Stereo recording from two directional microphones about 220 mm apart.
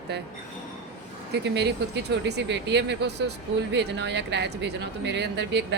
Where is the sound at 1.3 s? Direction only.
50° right (ahead or behind).